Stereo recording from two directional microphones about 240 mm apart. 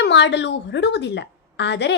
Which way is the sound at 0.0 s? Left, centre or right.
Left.